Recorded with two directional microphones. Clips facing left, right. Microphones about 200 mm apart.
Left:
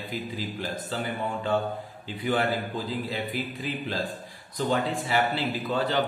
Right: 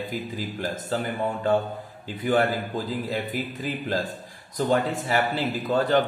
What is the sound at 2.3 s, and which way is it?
A man's voice, 45° right (ahead or behind).